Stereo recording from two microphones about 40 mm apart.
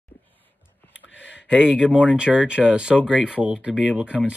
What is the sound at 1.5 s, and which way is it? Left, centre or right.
Speech, centre.